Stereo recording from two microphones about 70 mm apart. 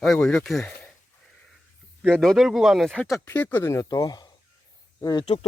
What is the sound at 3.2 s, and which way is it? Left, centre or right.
Speech, left.